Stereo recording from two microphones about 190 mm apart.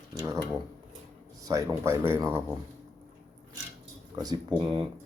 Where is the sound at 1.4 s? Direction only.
20° right (ahead or behind).